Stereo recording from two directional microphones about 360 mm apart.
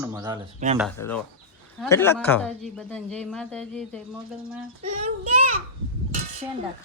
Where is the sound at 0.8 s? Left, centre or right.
Centre.